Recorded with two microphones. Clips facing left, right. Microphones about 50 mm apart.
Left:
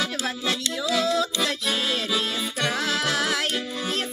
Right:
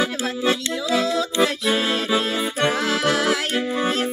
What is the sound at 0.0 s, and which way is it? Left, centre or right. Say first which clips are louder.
Music: right 5 dB; centre.